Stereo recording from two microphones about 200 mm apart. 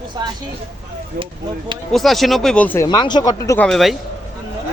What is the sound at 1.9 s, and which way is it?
Speech, centre (ahead or behind).